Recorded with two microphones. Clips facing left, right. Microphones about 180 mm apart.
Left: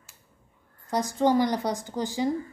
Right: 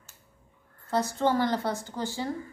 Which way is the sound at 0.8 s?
15° left (ahead or behind).